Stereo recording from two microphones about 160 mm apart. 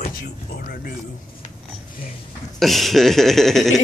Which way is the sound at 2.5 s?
Centre (ahead or behind).